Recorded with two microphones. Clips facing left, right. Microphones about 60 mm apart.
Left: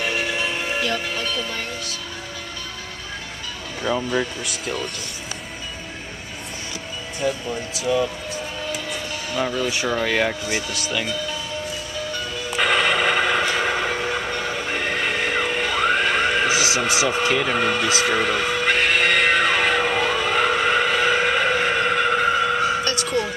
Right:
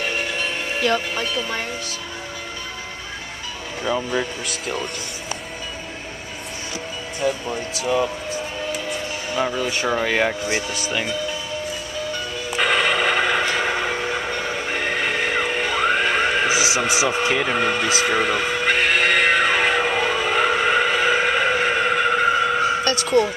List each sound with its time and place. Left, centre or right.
0.0 s music: centre
0.9 s speech: centre
3.8 s speech: centre
7.4 s speech: centre
9.3 s speech: centre
12.4 s music: centre